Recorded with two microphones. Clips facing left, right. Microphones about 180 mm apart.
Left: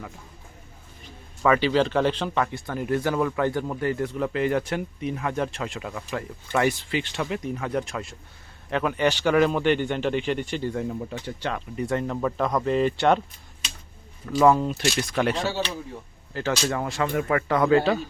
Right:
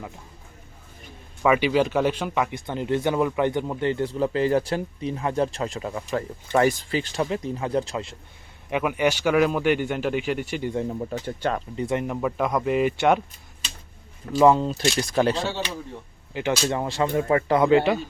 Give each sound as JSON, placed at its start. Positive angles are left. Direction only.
{"t": 1.4, "sound": "speech", "side_deg": -10}
{"t": 8.7, "sound": "speech", "side_deg": -10}
{"t": 11.1, "sound": "speech", "side_deg": -40}
{"t": 11.8, "sound": "speech", "side_deg": -15}
{"t": 14.4, "sound": "speech", "side_deg": -25}
{"t": 16.3, "sound": "speech", "side_deg": -15}